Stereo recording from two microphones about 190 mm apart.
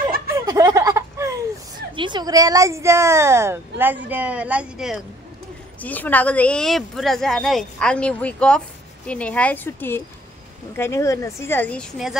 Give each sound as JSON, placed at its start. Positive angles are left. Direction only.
{"t": 0.5, "sound": "a sound", "side_deg": -15}
{"t": 2.0, "sound": "speech", "side_deg": -25}
{"t": 5.8, "sound": "a woman's voice", "side_deg": 10}